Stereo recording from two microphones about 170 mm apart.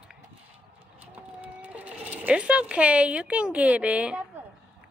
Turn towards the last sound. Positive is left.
turn(degrees=-5)  # may be behind; listen again after turning